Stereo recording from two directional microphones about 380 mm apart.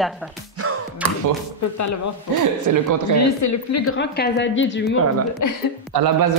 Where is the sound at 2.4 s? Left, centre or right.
Right.